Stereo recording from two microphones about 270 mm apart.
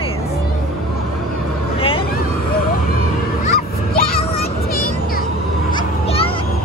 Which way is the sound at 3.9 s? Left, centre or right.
Left.